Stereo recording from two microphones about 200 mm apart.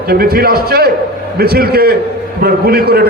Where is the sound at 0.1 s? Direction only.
50° right (ahead or behind).